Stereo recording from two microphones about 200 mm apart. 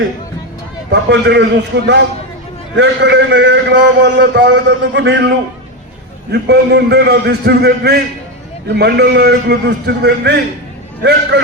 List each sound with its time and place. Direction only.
0.9 s a man's voice: 60° right (ahead or behind)
6.3 s a man's voice: 55° right (ahead or behind)